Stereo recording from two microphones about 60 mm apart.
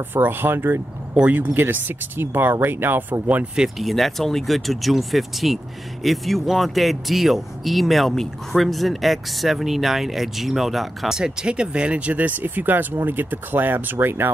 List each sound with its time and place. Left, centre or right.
0.1 s speech: right
1.1 s speech: right
3.7 s speech: centre; by 14.3 s right